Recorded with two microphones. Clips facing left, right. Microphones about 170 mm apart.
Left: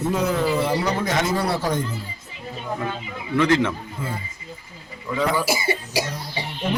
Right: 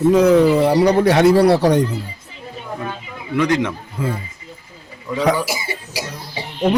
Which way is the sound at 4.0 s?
85° right.